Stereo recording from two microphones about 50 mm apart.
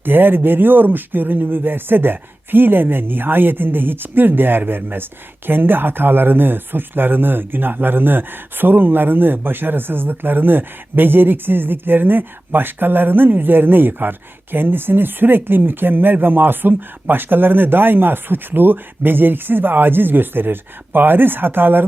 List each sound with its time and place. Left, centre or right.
0.0 s speech: right